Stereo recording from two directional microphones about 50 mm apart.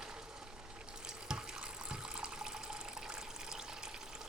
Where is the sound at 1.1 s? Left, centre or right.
Centre.